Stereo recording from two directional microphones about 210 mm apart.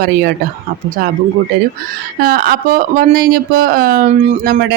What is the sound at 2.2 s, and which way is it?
Speech, 45° right (ahead or behind).